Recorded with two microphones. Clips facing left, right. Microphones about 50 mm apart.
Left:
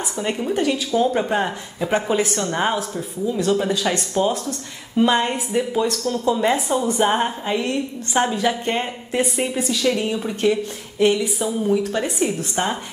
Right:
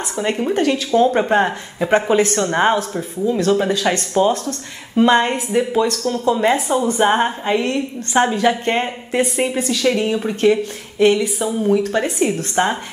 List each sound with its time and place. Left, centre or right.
0.1 s a woman's voice: right
0.6 s a woman's voice: right